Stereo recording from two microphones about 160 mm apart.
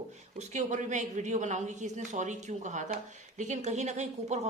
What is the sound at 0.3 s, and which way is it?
Speech, 50° right (ahead or behind).